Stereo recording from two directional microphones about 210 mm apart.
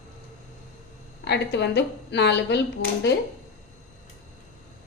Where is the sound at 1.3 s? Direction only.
55° left (ahead or behind).